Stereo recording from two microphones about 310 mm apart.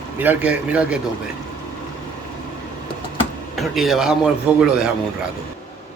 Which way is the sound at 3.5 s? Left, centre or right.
Centre.